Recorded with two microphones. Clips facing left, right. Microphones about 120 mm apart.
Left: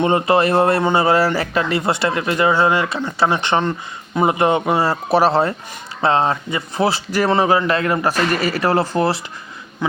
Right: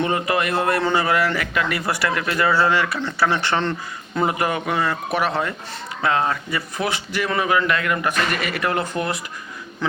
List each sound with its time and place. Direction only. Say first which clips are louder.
0.0 s speech: left 6 dB; 30° left (ahead or behind)